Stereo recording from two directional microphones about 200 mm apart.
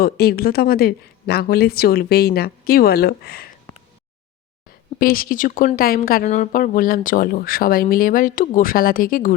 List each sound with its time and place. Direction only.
0.0 s speech: 50° left (ahead or behind)
4.9 s speech: 45° left (ahead or behind)